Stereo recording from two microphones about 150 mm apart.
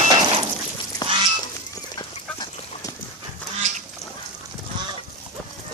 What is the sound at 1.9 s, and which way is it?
Duck, 30° left (ahead or behind).